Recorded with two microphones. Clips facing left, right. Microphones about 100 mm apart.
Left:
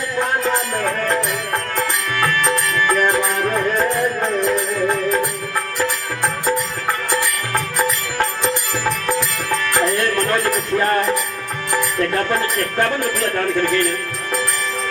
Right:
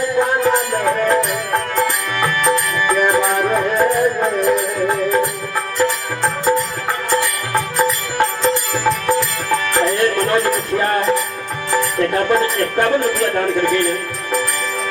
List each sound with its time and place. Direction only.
0.4 s music: 15° right (ahead or behind)
11.7 s speech: 20° right (ahead or behind)